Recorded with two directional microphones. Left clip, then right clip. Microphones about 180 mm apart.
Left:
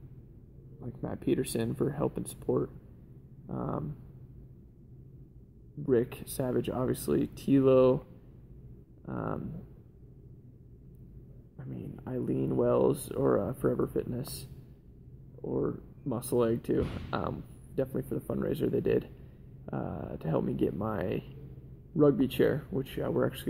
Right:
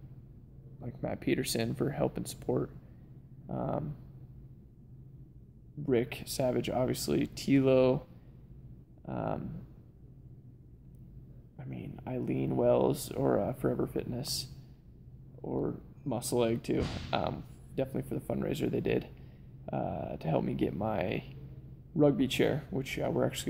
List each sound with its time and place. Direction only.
0.7 s speech: 15° right (ahead or behind)
5.9 s speech: 10° right (ahead or behind)
9.0 s speech: 10° right (ahead or behind)
11.5 s a sound: 20° right (ahead or behind)
11.9 s speech: 15° right (ahead or behind)
15.4 s speech: 10° right (ahead or behind)